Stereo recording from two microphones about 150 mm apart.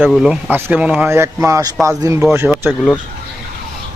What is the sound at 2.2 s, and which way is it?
Speech, 10° right (ahead or behind).